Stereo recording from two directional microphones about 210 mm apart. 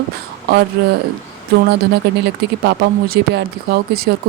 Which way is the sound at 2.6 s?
50° right (ahead or behind).